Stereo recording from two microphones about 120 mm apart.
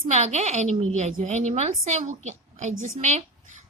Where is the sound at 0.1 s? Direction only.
70° right (ahead or behind).